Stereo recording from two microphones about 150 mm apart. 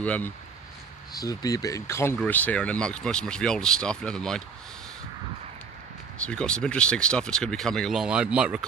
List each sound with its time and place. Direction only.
0.0 s speech: 10° left (ahead or behind)
1.1 s speech: 25° left (ahead or behind); by 4.4 s 5° left (ahead or behind)
6.1 s speech: 5° left (ahead or behind)